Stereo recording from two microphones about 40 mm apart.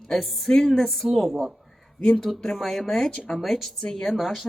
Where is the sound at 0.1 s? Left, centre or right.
Centre.